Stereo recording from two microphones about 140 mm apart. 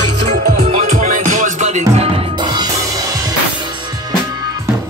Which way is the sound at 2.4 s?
30° right (ahead or behind).